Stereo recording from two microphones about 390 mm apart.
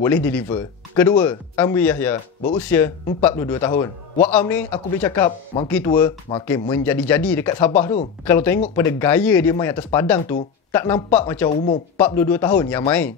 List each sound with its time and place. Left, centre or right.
0.0 s a man's voice: centre
11.5 s speech: centre
12.0 s a man's voice: centre